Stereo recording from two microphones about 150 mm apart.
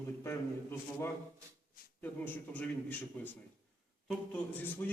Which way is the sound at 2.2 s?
10° left (ahead or behind).